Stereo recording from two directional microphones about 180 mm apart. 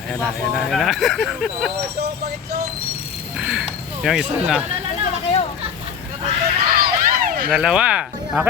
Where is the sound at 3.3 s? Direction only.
5° right (ahead or behind).